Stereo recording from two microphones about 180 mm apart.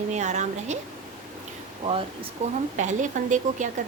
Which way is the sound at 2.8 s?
45° right (ahead or behind).